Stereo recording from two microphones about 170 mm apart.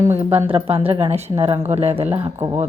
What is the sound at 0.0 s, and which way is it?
Speech, 15° right (ahead or behind).